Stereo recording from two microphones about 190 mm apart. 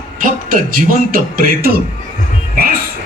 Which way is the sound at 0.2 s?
45° right (ahead or behind).